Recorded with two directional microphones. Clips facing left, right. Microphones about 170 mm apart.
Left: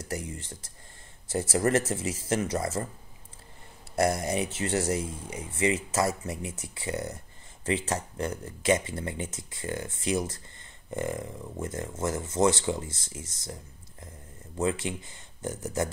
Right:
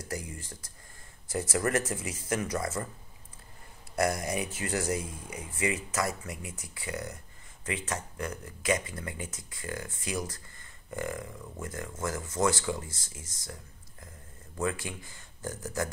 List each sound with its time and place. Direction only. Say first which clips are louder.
0.1 s speech: left 3 dB; 25° left (ahead or behind)
3.9 s speech: left 3 dB; 25° left (ahead or behind)
14.6 s speech: left 4 dB; 20° left (ahead or behind)